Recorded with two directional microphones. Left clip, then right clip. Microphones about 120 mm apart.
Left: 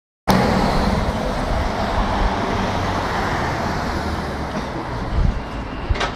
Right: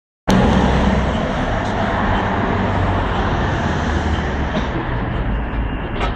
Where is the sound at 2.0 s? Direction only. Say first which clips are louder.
Right 2 dB; 25° left (ahead or behind).